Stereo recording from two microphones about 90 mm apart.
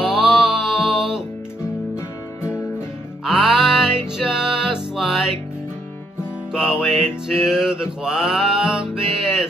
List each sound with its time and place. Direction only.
0.1 s a sound: 5° right (ahead or behind)
2.0 s music: 30° left (ahead or behind)
3.3 s music: 5° right (ahead or behind)
6.5 s music: 5° right (ahead or behind)